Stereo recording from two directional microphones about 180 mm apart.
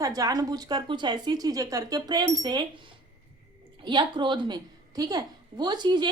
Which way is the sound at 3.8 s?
25° right (ahead or behind).